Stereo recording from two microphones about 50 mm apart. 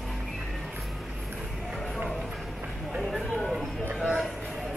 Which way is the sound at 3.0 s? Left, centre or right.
Centre.